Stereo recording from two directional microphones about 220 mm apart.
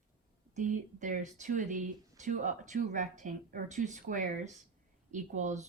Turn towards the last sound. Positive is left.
turn(degrees=-35)  # may be behind; listen again after turning